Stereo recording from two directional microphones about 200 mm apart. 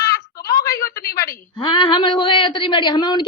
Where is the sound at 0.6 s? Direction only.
15° left (ahead or behind).